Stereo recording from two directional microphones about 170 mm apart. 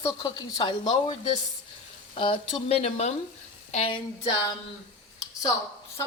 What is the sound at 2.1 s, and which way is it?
Frying, 30° left (ahead or behind).